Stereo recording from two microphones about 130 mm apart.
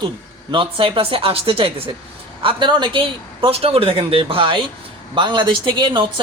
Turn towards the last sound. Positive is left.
turn(degrees=-35)  # may be behind; listen again after turning